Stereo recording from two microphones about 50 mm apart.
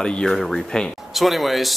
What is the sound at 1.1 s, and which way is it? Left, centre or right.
Speech, centre.